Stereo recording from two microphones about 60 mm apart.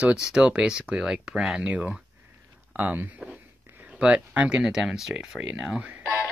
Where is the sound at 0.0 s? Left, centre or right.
Centre.